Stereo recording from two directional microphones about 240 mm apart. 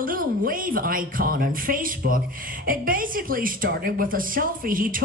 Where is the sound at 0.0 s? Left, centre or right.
Right.